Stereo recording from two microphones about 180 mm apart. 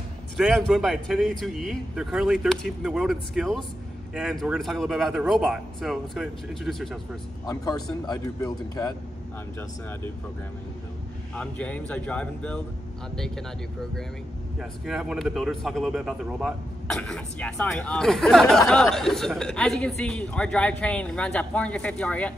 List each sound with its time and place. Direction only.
0.4 s speech: centre (ahead or behind)
7.4 s speech: 20° left (ahead or behind)
11.3 s speech: 5° left (ahead or behind)
14.6 s speech: centre (ahead or behind)